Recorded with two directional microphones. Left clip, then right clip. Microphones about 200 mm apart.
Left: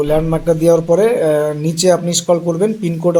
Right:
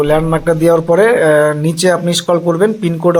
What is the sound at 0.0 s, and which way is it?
Speech, 5° right (ahead or behind).